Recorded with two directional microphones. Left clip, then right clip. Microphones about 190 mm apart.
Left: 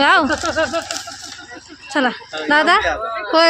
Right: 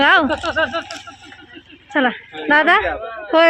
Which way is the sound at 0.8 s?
40° left (ahead or behind).